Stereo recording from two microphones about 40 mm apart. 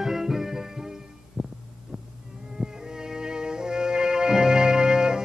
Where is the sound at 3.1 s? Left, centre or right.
Centre.